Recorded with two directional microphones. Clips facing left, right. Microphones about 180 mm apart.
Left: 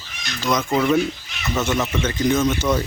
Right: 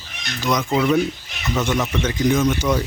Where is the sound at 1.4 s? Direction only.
5° left (ahead or behind).